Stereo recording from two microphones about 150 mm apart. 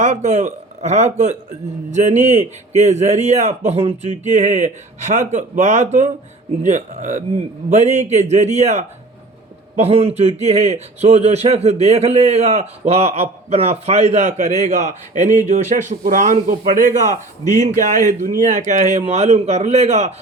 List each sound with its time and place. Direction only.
0.0 s speech: 50° right (ahead or behind)